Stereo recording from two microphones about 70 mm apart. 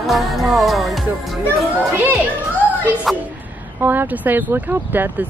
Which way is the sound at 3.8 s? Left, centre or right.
Right.